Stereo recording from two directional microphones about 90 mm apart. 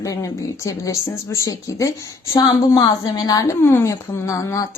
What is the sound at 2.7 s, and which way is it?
Speech, 50° left (ahead or behind).